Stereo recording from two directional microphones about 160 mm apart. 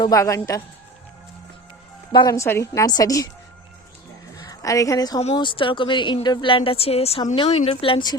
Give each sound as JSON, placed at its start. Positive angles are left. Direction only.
{"t": 0.0, "sound": "a woman's voice", "side_deg": 20}
{"t": 2.1, "sound": "a woman's voice", "side_deg": 20}
{"t": 4.4, "sound": "a woman's voice", "side_deg": 20}